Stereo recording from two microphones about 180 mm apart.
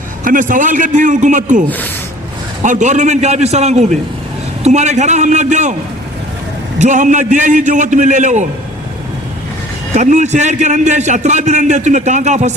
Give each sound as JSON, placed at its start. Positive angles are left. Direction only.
{"t": 0.3, "sound": "a man's voice", "side_deg": -45}
{"t": 2.6, "sound": "a man's voice", "side_deg": -40}
{"t": 6.7, "sound": "a man's voice", "side_deg": -45}
{"t": 9.9, "sound": "a man's voice", "side_deg": -40}